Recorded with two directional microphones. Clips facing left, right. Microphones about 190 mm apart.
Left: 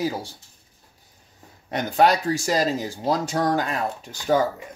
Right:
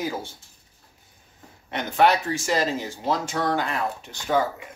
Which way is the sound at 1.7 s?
40° left (ahead or behind).